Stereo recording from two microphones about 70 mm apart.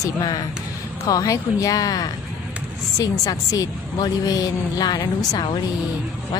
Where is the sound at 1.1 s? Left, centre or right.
Left.